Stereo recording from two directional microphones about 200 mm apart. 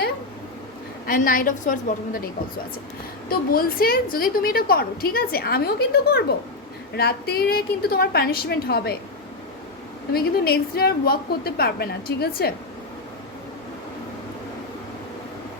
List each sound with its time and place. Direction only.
1.0 s a woman's voice: 45° left (ahead or behind)
3.2 s a woman's voice: 45° left (ahead or behind)
10.1 s a woman's voice: 50° left (ahead or behind)